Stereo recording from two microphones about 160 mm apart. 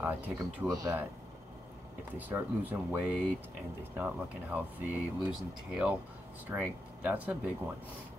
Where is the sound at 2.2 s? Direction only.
10° right (ahead or behind).